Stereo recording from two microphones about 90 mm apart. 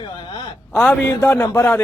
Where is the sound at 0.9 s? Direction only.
20° left (ahead or behind).